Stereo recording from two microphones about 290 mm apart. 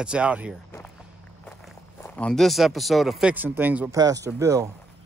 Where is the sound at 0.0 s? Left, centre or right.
Centre.